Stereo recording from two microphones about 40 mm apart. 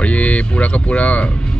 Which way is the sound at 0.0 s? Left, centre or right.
Left.